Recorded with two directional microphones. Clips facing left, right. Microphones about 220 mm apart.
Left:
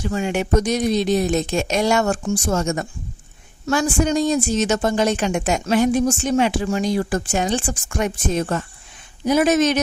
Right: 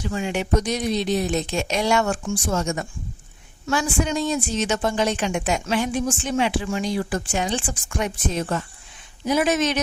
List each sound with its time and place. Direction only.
0.0 s a woman's voice: 45° left (ahead or behind)